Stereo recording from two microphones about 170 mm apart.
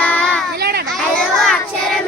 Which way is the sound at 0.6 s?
70° right (ahead or behind).